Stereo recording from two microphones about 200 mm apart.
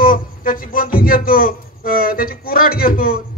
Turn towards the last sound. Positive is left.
turn(degrees=45)  # may be behind; listen again after turning